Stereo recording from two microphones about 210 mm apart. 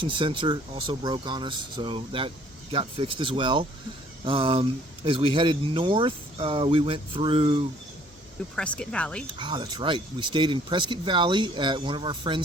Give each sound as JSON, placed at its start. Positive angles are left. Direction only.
{"t": 0.0, "sound": "speech", "side_deg": -25}
{"t": 8.5, "sound": "speech", "side_deg": 5}
{"t": 9.4, "sound": "speech", "side_deg": -25}